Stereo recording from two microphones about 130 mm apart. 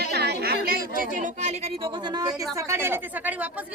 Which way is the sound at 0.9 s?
85° right.